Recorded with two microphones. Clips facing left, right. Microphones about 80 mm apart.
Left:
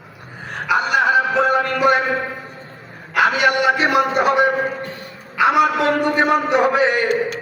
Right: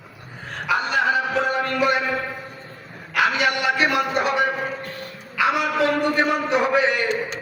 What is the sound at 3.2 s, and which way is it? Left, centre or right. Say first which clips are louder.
Speech: left 4 dB; left.